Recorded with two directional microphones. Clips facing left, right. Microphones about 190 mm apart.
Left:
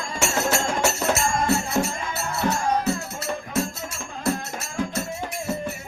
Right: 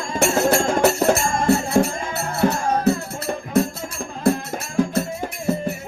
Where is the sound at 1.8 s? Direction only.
55° right (ahead or behind).